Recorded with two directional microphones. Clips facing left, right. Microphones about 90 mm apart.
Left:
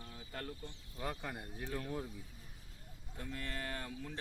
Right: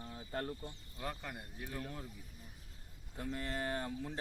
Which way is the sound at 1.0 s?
25° left (ahead or behind).